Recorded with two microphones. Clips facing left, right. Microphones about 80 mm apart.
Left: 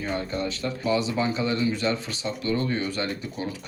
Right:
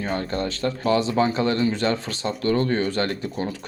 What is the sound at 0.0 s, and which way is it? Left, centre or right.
Speech, right.